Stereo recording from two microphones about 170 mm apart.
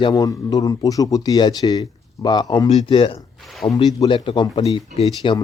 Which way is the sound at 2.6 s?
35° left (ahead or behind).